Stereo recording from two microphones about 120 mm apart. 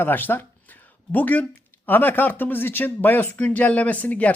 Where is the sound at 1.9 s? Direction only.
15° left (ahead or behind).